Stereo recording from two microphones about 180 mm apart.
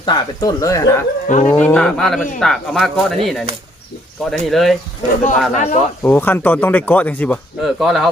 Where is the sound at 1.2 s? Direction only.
45° left (ahead or behind).